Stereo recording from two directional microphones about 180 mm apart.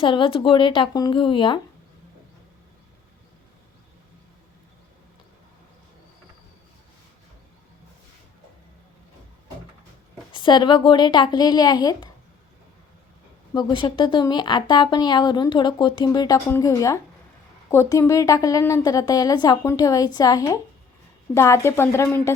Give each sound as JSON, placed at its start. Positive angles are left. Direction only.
{"t": 0.0, "sound": "speech", "side_deg": 30}
{"t": 10.3, "sound": "speech", "side_deg": 25}
{"t": 13.5, "sound": "speech", "side_deg": 20}